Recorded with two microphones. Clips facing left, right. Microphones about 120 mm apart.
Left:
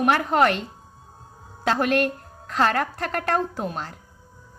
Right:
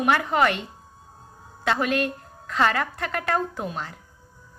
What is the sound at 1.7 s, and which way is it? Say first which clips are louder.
A woman's voice: left 3 dB; 55° left (ahead or behind).